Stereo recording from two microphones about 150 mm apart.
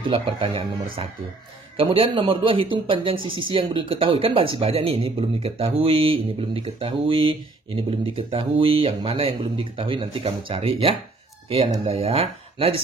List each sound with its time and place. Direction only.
0.0 s speech: 30° right (ahead or behind)
1.8 s speech: 35° right (ahead or behind)